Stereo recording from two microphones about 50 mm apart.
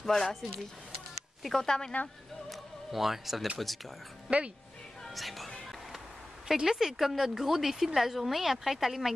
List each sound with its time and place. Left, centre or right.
0.0 s speech: centre
1.4 s speech: centre
2.5 s music: centre
3.5 s speech: centre
4.3 s a woman's voice: centre
5.0 s speech: centre
6.4 s a woman's voice: centre